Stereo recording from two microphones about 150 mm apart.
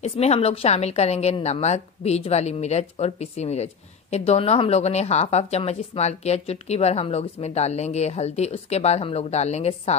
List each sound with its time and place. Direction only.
0.0 s a woman's voice: 45° left (ahead or behind)